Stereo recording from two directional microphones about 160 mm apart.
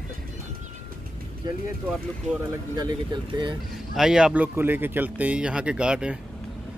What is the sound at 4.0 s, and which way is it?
Speech, 5° right (ahead or behind).